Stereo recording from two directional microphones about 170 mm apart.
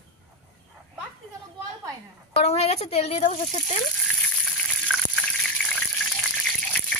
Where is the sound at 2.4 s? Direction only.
40° left (ahead or behind).